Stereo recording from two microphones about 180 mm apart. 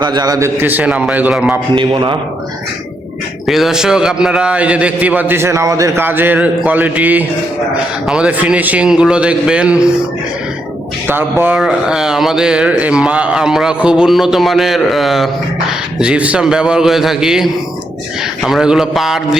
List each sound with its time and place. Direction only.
0.0 s a man's voice: 25° right (ahead or behind); by 1.5 s 5° right (ahead or behind)
1.7 s a man's voice: 25° right (ahead or behind)
3.4 s a man's voice: centre (ahead or behind)
11.1 s speech: 10° right (ahead or behind)